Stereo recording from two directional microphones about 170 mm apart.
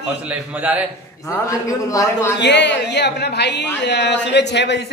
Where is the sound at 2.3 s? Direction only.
90° left.